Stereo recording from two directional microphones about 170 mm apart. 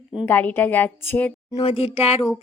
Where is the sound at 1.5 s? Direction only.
35° left (ahead or behind).